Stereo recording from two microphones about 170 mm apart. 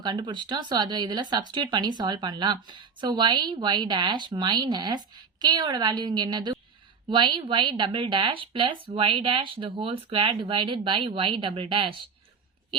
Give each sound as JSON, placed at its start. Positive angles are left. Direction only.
{"t": 0.0, "sound": "speech", "side_deg": -25}